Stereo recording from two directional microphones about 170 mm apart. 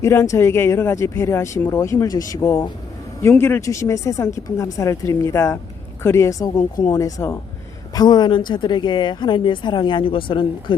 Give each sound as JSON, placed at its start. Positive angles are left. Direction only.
{"t": 0.0, "sound": "speech", "side_deg": 15}